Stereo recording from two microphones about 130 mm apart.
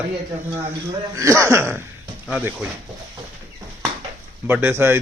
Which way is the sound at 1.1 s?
20° right (ahead or behind).